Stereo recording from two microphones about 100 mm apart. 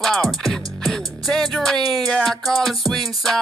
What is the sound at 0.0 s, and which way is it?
Music, centre (ahead or behind).